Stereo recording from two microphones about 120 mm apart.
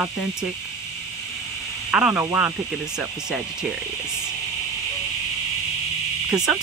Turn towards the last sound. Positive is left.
turn(degrees=-5)  # may be behind; listen again after turning